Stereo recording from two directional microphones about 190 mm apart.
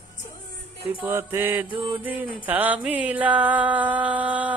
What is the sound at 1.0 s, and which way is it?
Music, 10° right (ahead or behind).